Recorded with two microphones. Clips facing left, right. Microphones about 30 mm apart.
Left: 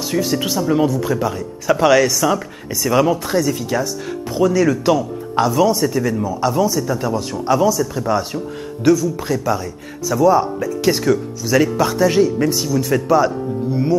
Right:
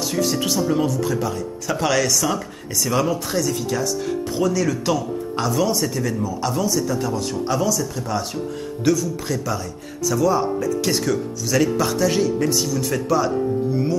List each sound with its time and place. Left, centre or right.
0.0 s speech: centre
8.8 s speech: centre